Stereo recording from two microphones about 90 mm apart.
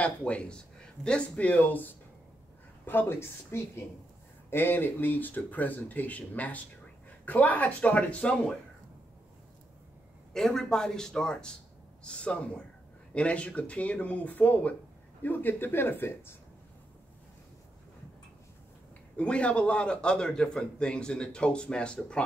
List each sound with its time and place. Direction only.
0.0 s a man's voice: 15° left (ahead or behind)
10.3 s a man's voice: 5° left (ahead or behind); by 16.3 s 25° left (ahead or behind)
19.1 s a man's voice: 15° left (ahead or behind)